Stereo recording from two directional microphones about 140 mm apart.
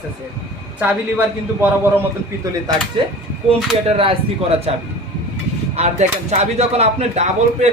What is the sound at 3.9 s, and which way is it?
Speech, 40° right (ahead or behind).